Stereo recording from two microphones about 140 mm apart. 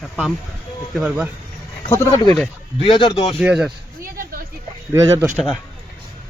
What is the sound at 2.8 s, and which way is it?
Speech, 40° left (ahead or behind).